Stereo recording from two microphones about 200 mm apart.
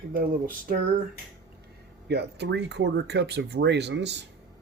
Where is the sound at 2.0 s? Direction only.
55° right (ahead or behind).